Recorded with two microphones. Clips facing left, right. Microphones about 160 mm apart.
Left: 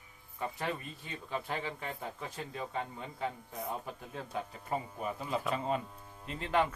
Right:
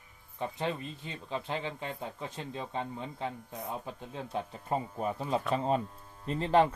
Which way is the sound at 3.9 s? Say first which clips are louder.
Right 3 dB; 25° right (ahead or behind).